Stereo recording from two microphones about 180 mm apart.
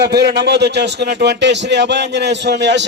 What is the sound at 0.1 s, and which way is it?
Speech, 70° right (ahead or behind).